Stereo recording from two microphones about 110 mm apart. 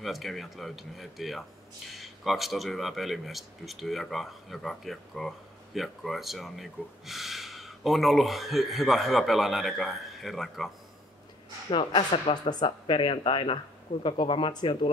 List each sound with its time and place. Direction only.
0.0 s speech: centre (ahead or behind)
11.7 s speech: 45° left (ahead or behind)
12.8 s speech: 50° left (ahead or behind)